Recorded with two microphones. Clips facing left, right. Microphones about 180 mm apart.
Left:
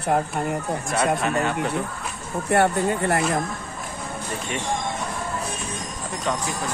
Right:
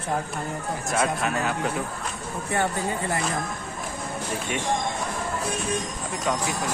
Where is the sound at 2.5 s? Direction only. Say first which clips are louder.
Left 6 dB; 65° left (ahead or behind).